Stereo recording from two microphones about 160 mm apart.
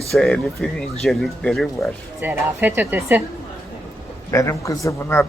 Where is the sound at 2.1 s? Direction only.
10° right (ahead or behind).